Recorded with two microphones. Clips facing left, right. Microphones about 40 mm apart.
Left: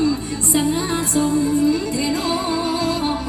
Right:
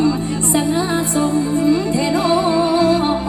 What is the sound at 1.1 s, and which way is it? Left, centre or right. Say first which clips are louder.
Music: left 2 dB; right.